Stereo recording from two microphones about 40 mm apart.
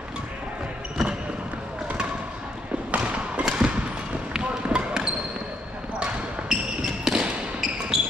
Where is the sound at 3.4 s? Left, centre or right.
Right.